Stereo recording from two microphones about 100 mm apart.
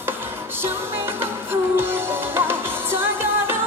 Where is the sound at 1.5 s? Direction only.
25° right (ahead or behind).